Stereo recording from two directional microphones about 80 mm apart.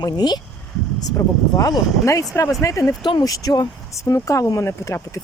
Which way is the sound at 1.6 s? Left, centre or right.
Left.